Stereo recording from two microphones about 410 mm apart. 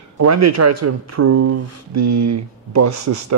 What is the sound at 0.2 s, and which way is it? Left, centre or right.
Speech, right.